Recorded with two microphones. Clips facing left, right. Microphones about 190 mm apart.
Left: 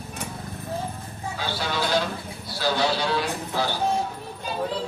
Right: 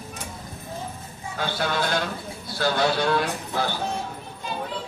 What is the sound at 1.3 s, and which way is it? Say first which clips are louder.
A man's voice: right 3 dB; 55° right (ahead or behind).